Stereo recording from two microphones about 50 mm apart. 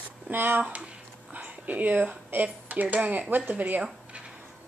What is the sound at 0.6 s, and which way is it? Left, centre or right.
Speech, right.